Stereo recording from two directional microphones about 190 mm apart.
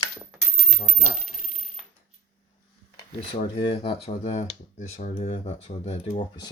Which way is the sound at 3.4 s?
30° left (ahead or behind).